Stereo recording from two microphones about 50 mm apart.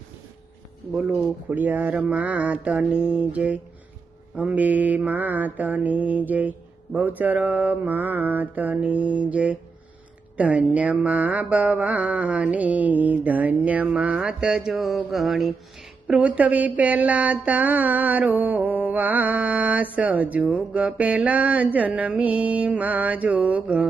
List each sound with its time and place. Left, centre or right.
1.5 s a sound: right
2.0 s mantra: right
4.4 s a sound: right
8.8 s mantra: right
10.3 s speech: right
10.8 s mantra: right
14.8 s mantra: centre
16.2 s a sound: right
22.2 s mantra: right